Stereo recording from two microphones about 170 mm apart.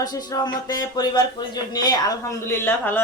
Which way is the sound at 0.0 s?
20° left (ahead or behind).